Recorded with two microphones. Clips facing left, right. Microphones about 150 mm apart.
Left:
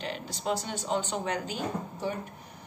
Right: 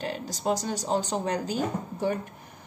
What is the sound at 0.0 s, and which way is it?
Speech, 40° right (ahead or behind).